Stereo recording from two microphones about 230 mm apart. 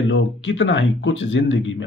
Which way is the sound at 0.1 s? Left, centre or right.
Left.